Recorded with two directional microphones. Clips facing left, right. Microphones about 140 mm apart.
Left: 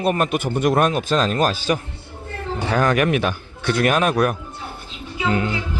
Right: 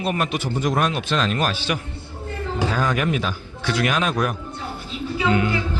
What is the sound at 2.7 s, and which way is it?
A man's voice, 65° left (ahead or behind).